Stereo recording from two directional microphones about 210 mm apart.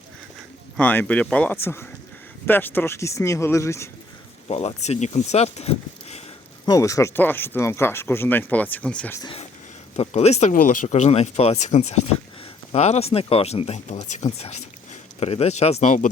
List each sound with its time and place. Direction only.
0.8 s speech: 5° left (ahead or behind)
4.4 s speech: 30° left (ahead or behind)
6.7 s speech: 15° left (ahead or behind)
9.2 s speech: 25° left (ahead or behind)